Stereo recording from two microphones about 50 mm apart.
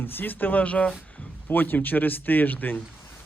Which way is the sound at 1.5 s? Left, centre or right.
Left.